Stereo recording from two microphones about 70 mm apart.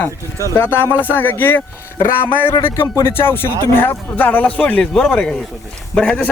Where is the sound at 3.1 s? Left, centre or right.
Left.